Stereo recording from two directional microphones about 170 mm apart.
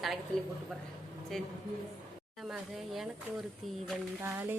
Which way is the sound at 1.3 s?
5° left (ahead or behind).